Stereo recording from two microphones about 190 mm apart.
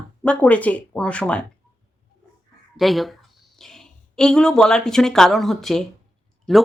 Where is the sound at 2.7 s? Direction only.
Centre (ahead or behind).